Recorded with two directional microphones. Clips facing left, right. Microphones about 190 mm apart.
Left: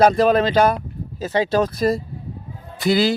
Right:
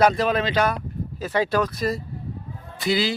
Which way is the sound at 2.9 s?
45° left (ahead or behind).